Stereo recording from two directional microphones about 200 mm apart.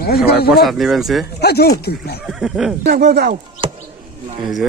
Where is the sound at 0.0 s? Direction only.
50° left (ahead or behind).